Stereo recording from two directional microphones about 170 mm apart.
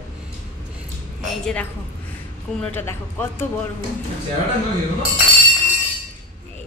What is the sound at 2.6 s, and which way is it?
Speech, 10° left (ahead or behind).